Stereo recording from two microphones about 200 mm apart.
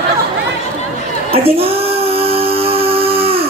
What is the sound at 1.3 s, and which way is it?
Female singing, 30° right (ahead or behind).